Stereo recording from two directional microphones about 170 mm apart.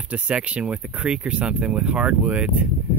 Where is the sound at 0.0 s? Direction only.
5° right (ahead or behind).